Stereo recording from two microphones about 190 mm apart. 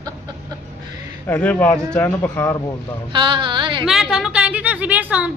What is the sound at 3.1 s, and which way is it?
Speech, 25° right (ahead or behind).